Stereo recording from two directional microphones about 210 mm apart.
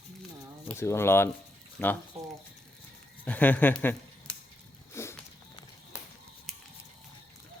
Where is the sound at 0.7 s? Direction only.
10° left (ahead or behind).